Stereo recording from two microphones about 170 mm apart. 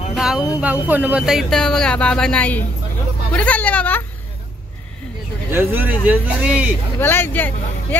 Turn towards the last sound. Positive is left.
turn(degrees=10)  # may be behind; listen again after turning